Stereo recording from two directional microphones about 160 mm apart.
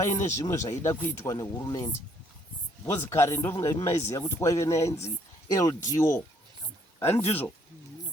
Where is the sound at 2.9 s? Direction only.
15° left (ahead or behind).